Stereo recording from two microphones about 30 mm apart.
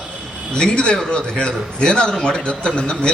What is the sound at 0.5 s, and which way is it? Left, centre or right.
A man's voice, left.